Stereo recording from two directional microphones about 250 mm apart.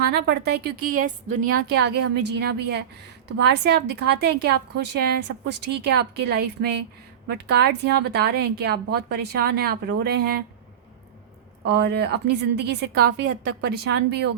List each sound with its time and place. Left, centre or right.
0.0 s a woman's voice: right
11.6 s a woman's voice: right